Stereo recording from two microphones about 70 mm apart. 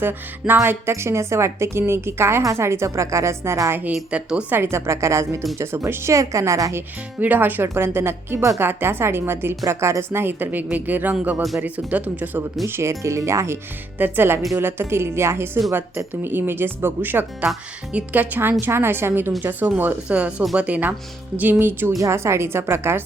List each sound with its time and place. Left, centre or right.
0.0 s a woman's voice: right
4.1 s a woman's voice: centre
4.5 s a woman's voice: right
7.2 s a woman's voice: right
12.6 s a woman's voice: right
12.9 s a woman's voice: right
14.0 s a woman's voice: right
21.6 s a woman's voice: right
21.9 s a woman's voice: right